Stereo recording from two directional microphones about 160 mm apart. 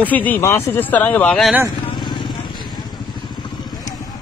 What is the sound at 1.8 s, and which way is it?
Vehicle, 30° left (ahead or behind).